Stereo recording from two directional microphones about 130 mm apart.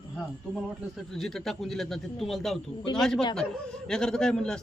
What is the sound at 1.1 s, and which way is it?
A man's voice, centre (ahead or behind).